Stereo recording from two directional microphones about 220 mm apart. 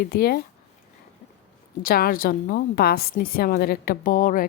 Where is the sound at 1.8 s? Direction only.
40° left (ahead or behind).